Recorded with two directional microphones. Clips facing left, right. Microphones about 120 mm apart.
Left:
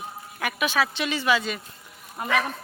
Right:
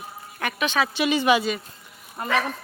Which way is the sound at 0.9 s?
15° right (ahead or behind).